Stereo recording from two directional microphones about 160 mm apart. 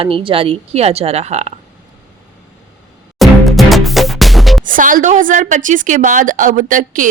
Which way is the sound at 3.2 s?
Centre (ahead or behind).